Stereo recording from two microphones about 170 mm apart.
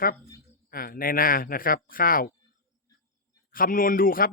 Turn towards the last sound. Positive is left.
turn(degrees=55)  # may be behind; listen again after turning